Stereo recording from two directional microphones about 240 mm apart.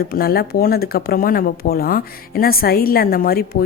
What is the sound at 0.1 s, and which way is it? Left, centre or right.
Speech, left.